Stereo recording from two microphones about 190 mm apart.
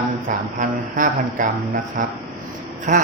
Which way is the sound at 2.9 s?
40° right (ahead or behind).